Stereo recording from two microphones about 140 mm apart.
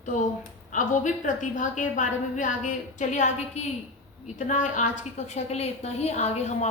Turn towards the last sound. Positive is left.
turn(degrees=50)  # may be behind; listen again after turning